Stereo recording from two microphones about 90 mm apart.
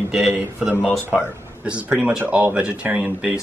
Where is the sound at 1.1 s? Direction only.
10° right (ahead or behind).